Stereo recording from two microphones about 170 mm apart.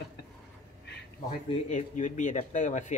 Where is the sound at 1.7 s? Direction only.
45° left (ahead or behind).